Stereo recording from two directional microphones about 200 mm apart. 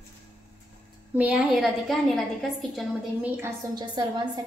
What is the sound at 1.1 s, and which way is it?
A woman's voice, 5° right (ahead or behind).